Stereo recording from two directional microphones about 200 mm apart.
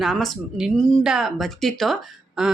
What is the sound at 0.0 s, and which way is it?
Speech, centre (ahead or behind).